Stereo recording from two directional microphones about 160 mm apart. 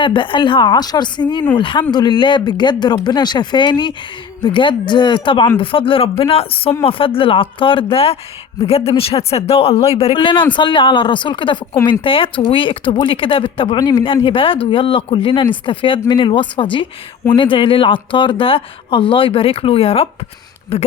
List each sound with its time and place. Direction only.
0.0 s speech: 30° left (ahead or behind)